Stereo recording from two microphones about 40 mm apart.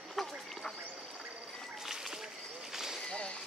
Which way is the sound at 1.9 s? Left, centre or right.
Centre.